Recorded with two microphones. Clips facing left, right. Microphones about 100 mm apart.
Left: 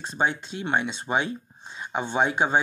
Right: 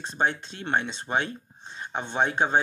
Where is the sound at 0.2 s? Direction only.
15° left (ahead or behind).